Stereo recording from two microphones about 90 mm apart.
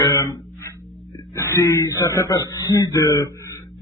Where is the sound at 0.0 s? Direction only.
40° left (ahead or behind).